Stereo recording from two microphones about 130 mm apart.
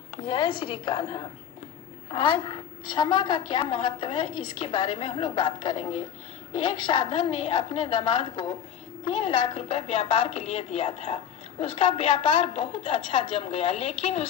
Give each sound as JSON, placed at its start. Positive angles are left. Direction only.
{"t": 0.2, "sound": "a woman's voice", "side_deg": 35}